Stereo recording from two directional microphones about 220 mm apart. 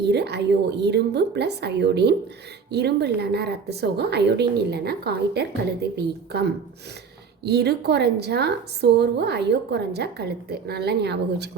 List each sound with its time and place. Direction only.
0.0 s a woman's voice: 50° right (ahead or behind)